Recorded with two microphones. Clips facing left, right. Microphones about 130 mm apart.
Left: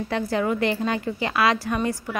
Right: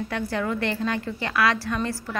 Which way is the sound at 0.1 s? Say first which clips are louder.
Left 5 dB; 20° left (ahead or behind).